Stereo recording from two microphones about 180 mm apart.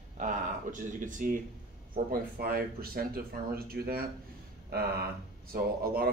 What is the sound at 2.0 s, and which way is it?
Speech, 55° right (ahead or behind).